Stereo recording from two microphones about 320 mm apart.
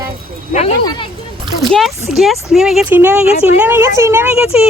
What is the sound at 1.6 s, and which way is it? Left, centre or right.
Speech, centre.